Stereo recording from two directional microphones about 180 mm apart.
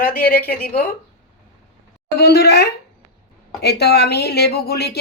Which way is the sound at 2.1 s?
65° left (ahead or behind).